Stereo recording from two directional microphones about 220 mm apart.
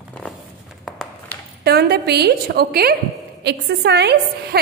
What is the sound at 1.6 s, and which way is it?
A woman's voice, 45° right (ahead or behind).